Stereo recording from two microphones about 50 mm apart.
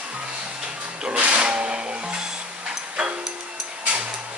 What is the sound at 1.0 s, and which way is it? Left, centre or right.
Music, right.